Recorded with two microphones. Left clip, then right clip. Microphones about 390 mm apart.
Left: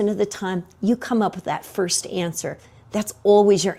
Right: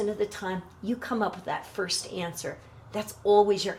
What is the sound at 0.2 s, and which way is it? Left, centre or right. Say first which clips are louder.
A woman's voice: left 6 dB; left.